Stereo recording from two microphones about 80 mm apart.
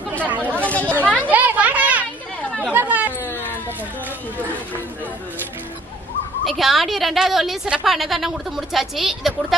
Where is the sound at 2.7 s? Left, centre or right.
Centre.